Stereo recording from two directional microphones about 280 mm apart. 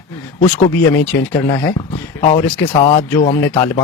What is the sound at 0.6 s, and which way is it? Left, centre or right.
Speech, centre.